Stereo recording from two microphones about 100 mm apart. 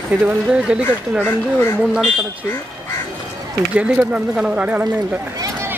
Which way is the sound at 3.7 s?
10° right (ahead or behind).